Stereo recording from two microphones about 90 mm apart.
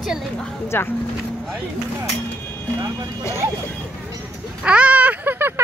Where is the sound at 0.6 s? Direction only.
25° left (ahead or behind).